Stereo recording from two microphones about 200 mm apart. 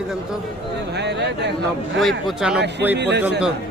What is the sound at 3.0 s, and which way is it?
Speech, 60° right (ahead or behind).